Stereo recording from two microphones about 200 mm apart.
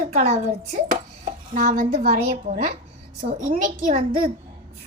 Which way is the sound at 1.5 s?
45° right (ahead or behind).